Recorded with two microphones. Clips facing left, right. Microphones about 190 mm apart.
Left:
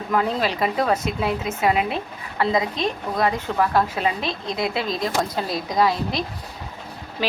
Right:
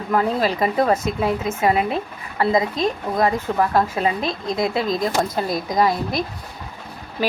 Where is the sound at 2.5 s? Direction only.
40° right (ahead or behind).